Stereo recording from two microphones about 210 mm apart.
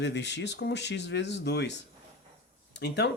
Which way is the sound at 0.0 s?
55° left (ahead or behind).